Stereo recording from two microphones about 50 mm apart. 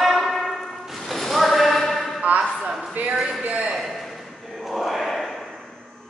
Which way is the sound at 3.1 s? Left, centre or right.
Centre.